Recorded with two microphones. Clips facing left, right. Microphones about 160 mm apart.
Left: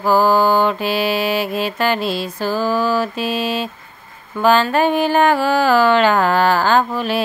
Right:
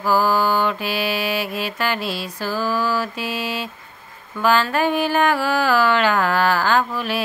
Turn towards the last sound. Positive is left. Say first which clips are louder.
# left 4 dB
turn(degrees=25)  # may be behind; listen again after turning